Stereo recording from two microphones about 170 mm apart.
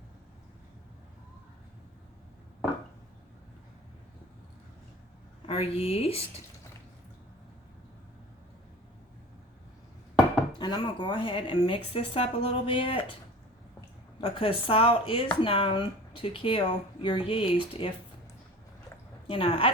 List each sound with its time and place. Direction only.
5.5 s speech: 35° left (ahead or behind)
10.6 s speech: 25° left (ahead or behind)
14.2 s speech: 35° left (ahead or behind)
19.3 s speech: 30° left (ahead or behind)